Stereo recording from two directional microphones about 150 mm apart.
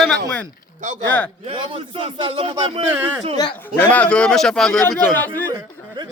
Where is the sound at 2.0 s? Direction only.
35° right (ahead or behind).